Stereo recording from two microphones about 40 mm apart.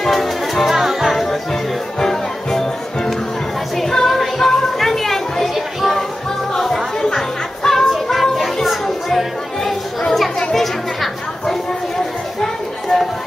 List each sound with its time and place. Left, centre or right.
0.0 s music: centre
0.7 s music: centre
1.1 s music: centre
4.4 s chatter: centre
4.7 s a sound: centre
6.5 s music: centre
7.9 s music: centre
10.5 s chatter: centre
12.4 s children playing: centre